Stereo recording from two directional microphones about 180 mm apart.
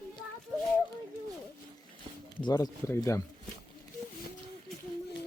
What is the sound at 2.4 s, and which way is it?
Speech, 20° left (ahead or behind).